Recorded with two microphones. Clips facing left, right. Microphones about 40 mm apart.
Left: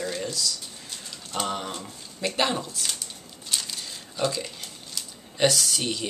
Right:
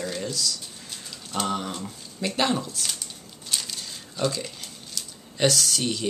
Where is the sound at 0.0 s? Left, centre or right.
Centre.